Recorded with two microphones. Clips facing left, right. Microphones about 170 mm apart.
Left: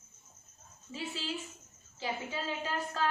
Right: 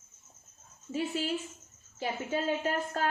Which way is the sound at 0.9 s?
55° right (ahead or behind).